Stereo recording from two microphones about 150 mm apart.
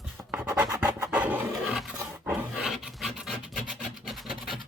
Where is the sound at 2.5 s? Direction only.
5° right (ahead or behind).